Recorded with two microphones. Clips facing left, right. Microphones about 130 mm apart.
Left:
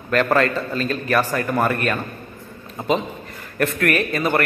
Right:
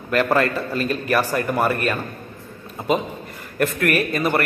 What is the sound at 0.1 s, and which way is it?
A man's voice, 10° right (ahead or behind).